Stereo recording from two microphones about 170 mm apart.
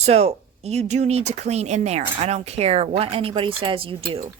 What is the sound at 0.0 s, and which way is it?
Speech, 40° right (ahead or behind).